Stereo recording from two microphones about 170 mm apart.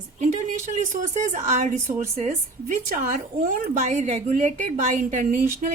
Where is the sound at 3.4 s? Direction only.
55° right (ahead or behind).